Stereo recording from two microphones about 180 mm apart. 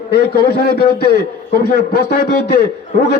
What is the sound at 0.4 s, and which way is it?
Speech, 60° left (ahead or behind).